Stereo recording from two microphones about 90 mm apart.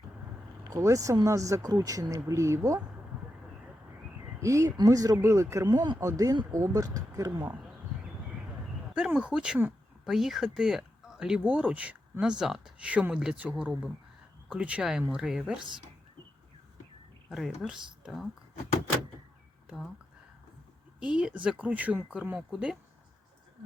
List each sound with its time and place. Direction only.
0.7 s speech: 35° right (ahead or behind)
4.4 s speech: 35° right (ahead or behind)
5.6 s speech: 55° right (ahead or behind)
6.0 s speech: 35° right (ahead or behind)
9.0 s speech: 10° right (ahead or behind)
17.2 s speech: 5° right (ahead or behind)
21.0 s speech: 10° right (ahead or behind)